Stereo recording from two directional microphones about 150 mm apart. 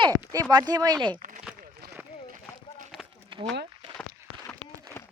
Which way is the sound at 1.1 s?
65° right (ahead or behind).